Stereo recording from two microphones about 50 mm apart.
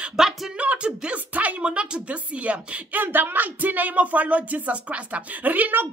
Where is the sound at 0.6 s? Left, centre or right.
Right.